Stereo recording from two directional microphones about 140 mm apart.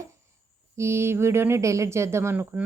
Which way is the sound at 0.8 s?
20° right (ahead or behind).